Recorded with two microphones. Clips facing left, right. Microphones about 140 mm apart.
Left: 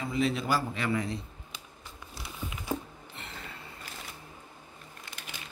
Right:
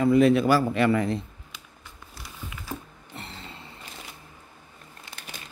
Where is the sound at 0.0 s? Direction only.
55° right (ahead or behind).